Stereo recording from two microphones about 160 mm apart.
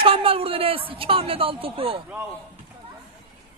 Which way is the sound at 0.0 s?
35° right (ahead or behind).